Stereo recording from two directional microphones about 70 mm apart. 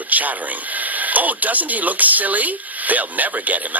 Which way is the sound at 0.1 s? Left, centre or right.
Right.